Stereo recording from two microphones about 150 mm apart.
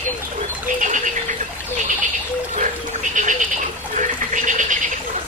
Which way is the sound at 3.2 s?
55° right (ahead or behind).